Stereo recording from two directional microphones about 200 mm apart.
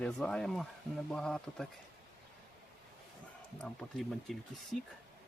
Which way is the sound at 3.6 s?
5° left (ahead or behind).